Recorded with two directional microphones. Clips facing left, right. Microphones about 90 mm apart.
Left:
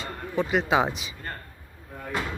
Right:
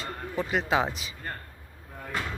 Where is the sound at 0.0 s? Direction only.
Centre (ahead or behind).